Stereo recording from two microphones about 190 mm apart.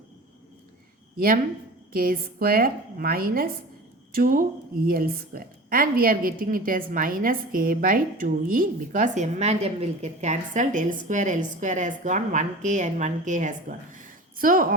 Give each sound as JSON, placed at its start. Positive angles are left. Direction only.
{"t": 1.9, "sound": "a woman's voice", "side_deg": -50}